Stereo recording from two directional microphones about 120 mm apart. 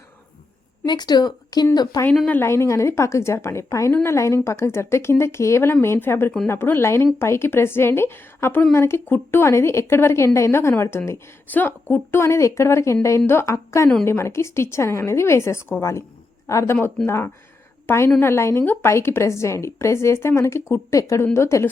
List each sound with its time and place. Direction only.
0.9 s a woman's voice: 35° left (ahead or behind)
2.2 s a woman's voice: 15° left (ahead or behind)
17.8 s a woman's voice: 20° left (ahead or behind)